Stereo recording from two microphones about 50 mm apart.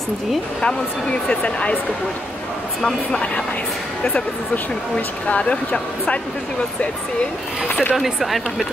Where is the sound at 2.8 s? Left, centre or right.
Centre.